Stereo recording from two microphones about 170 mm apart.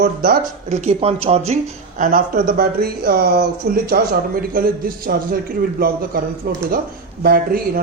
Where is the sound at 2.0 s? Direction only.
55° right (ahead or behind).